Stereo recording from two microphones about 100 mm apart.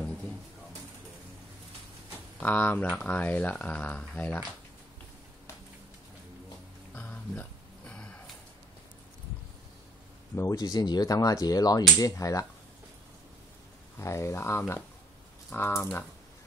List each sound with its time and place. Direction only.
2.4 s speech: 15° left (ahead or behind)
7.0 s a sound: 15° left (ahead or behind)
10.3 s speech: 35° left (ahead or behind)
13.9 s speech: 30° left (ahead or behind)